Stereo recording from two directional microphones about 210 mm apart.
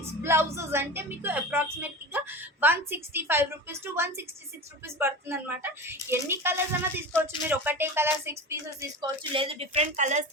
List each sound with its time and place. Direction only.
0.0 s speech: 10° right (ahead or behind)
9.3 s a woman's voice: 25° right (ahead or behind)